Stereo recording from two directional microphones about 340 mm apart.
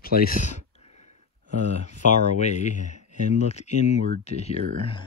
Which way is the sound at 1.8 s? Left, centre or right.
Left.